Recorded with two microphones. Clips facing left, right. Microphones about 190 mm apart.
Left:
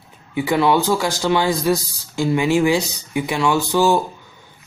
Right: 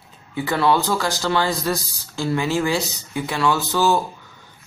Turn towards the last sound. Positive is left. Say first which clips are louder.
# left 3 dB
turn(degrees=15)  # may be behind; listen again after turning